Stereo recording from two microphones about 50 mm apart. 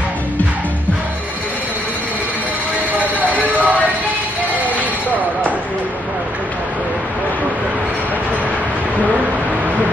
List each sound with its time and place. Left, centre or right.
3.4 s music: right